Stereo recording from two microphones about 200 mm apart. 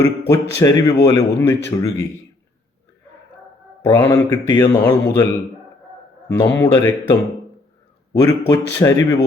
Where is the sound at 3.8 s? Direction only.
15° left (ahead or behind).